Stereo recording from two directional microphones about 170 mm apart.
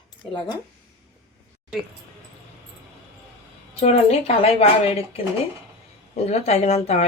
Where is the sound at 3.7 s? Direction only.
40° left (ahead or behind).